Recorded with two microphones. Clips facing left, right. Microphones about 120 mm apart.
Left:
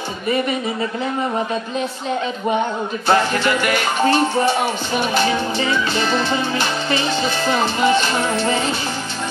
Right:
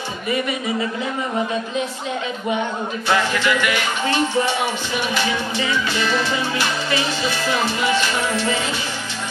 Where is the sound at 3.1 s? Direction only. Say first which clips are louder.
Left 3 dB; 40° left (ahead or behind).